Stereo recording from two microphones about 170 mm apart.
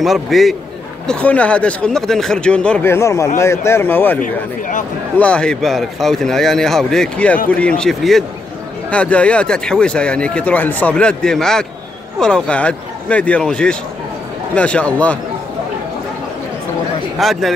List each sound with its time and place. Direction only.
0.0 s speech: centre (ahead or behind)
4.2 s speech: 50° left (ahead or behind)
5.1 s speech: 5° left (ahead or behind)
17.2 s speech: centre (ahead or behind)